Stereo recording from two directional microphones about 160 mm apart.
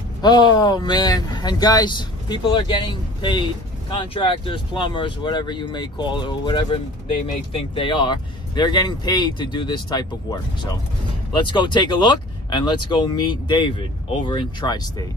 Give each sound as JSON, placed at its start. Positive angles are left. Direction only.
{"t": 0.2, "sound": "speech", "side_deg": 25}